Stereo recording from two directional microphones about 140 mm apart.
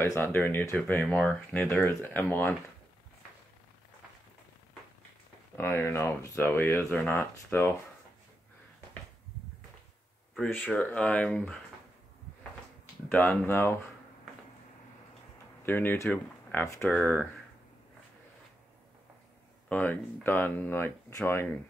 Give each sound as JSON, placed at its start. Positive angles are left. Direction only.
{"t": 0.0, "sound": "speech", "side_deg": 15}
{"t": 5.6, "sound": "speech", "side_deg": 15}
{"t": 10.3, "sound": "speech", "side_deg": 10}
{"t": 13.1, "sound": "speech", "side_deg": 15}
{"t": 15.6, "sound": "speech", "side_deg": 15}
{"t": 19.7, "sound": "speech", "side_deg": 10}